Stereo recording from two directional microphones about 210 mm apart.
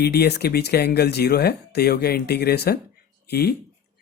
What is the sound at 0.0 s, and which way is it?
Speech, 50° left (ahead or behind).